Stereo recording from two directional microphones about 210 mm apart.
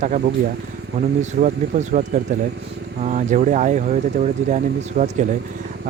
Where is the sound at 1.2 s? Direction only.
35° right (ahead or behind).